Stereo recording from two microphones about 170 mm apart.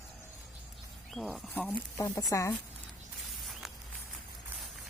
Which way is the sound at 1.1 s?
Centre (ahead or behind).